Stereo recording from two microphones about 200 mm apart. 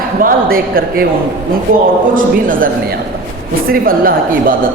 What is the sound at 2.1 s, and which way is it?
A man's voice, 45° right (ahead or behind).